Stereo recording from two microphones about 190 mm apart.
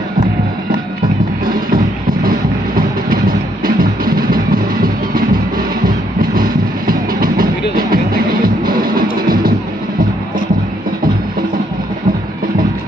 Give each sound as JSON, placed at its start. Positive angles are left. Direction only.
{"t": 1.4, "sound": "music", "side_deg": -50}